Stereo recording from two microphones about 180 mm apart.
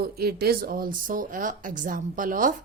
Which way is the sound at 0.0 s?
60° right (ahead or behind).